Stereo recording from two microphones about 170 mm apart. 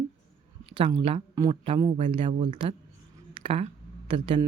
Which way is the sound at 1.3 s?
20° right (ahead or behind).